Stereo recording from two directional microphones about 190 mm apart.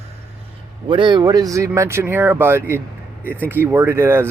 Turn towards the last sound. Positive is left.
turn(degrees=-15)  # may be behind; listen again after turning